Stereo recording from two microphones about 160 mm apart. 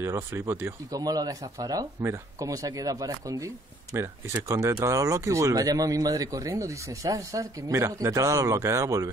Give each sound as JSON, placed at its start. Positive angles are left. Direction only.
{"t": 0.0, "sound": "speech", "side_deg": -15}